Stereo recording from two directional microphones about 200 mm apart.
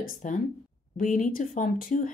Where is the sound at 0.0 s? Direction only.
40° left (ahead or behind).